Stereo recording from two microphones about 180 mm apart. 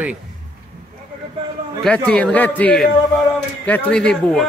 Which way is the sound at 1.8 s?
5° left (ahead or behind).